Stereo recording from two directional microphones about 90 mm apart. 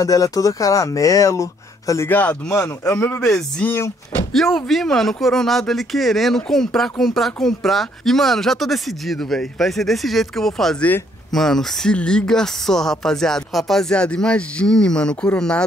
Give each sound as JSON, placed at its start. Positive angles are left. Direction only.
{"t": 0.0, "sound": "speech", "side_deg": 40}
{"t": 2.0, "sound": "a man's voice", "side_deg": 20}
{"t": 2.5, "sound": "a man's voice", "side_deg": 30}
{"t": 4.3, "sound": "speech", "side_deg": 5}